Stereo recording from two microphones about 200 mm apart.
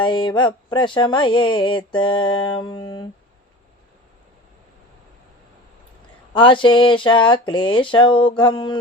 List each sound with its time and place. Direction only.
0.0 s speech: 25° left (ahead or behind)
6.3 s speech: 25° left (ahead or behind)